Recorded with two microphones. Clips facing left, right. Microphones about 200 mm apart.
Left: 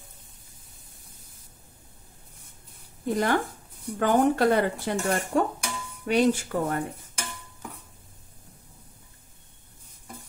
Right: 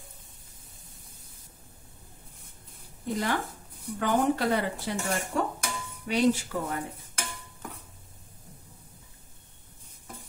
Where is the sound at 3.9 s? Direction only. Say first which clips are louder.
Left 4 dB; 50° left (ahead or behind).